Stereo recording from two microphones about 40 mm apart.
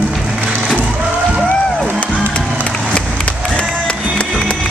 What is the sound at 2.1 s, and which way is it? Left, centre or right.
Music, left.